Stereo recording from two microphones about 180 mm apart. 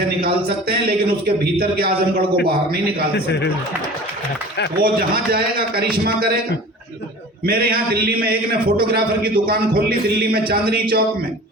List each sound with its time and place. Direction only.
0.4 s a man's voice: 55° right (ahead or behind)
4.8 s a man's voice: 55° right (ahead or behind)
7.4 s a man's voice: 55° right (ahead or behind)